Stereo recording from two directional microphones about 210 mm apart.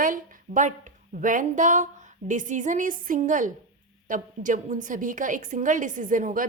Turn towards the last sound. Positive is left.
turn(degrees=-40)  # may be behind; listen again after turning